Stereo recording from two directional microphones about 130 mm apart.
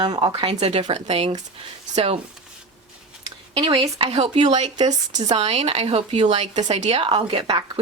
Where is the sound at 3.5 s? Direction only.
45° right (ahead or behind).